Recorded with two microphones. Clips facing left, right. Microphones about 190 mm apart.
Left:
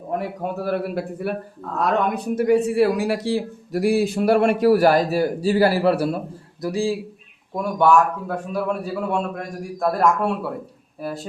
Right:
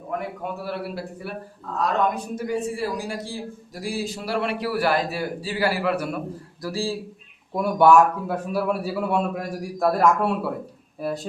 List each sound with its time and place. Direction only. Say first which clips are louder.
0.6 s a man's voice: left 9 dB; 50° left (ahead or behind)
2.1 s a man's voice: left 9 dB; 65° left (ahead or behind); by 6.1 s 35° left (ahead or behind)
6.6 s speech: left 5 dB; 15° left (ahead or behind)
7.5 s a man's voice: right 1 dB; 5° right (ahead or behind)